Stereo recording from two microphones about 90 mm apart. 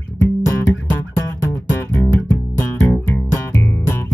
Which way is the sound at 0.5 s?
25° left (ahead or behind).